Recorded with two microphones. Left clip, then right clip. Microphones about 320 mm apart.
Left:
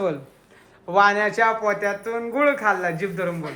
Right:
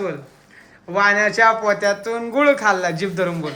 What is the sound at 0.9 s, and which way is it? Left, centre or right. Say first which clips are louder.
Speech: right 1 dB; centre.